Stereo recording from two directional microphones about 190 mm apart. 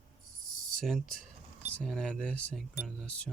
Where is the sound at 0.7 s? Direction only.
Centre (ahead or behind).